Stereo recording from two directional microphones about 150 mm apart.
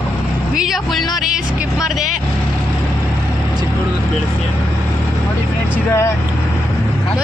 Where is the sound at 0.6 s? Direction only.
Centre (ahead or behind).